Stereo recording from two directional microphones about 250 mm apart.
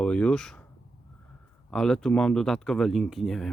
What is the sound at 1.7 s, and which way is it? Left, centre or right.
Speech, centre.